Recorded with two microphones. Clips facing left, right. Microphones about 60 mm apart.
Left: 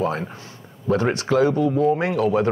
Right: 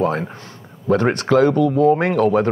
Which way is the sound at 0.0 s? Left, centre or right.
Right.